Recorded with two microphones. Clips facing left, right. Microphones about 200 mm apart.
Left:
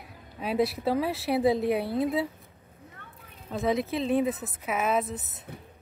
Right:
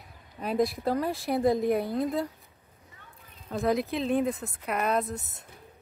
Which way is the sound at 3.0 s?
65° left (ahead or behind).